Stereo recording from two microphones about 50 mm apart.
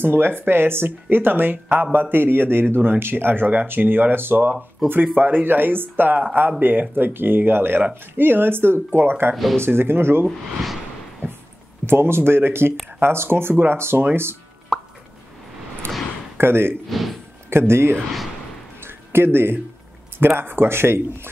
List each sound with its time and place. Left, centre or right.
0.0 s speech: right
10.2 s speech: centre
11.8 s speech: right
14.7 s plop: centre
16.3 s speech: right
16.9 s a sound: centre
17.5 s speech: right
18.8 s a sound: right
20.2 s speech: right